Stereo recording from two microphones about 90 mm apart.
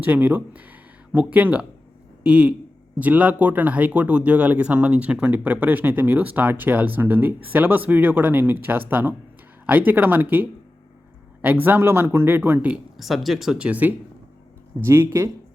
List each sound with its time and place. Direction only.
0.0 s speech: 20° right (ahead or behind)
13.0 s speech: centre (ahead or behind)
13.7 s speech: 20° right (ahead or behind)
14.8 s speech: 30° right (ahead or behind)